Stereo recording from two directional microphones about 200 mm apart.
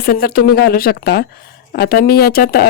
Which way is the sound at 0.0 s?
50° left (ahead or behind).